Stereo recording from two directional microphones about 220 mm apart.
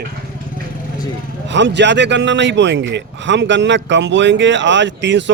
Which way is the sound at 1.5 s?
55° right (ahead or behind).